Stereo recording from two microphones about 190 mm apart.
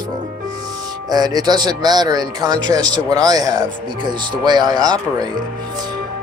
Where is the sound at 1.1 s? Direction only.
20° right (ahead or behind).